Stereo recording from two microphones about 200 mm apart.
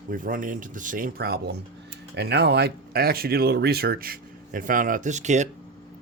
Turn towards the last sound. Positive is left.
turn(degrees=-35)  # may be behind; listen again after turning